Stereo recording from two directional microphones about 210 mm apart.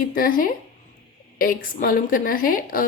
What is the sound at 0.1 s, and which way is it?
A woman's voice, 40° left (ahead or behind).